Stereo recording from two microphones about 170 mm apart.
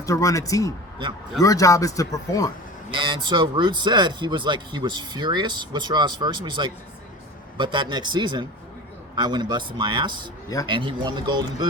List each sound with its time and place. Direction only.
0.0 s a man's voice: 20° left (ahead or behind)
2.9 s speech: 30° right (ahead or behind)